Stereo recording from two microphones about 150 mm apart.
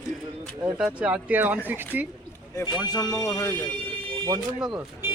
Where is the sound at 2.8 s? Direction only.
25° left (ahead or behind).